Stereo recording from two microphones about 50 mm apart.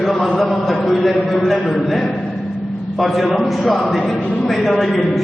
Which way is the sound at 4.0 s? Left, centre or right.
Centre.